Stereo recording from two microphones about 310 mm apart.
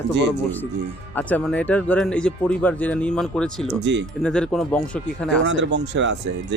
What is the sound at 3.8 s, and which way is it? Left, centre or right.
Speech, right.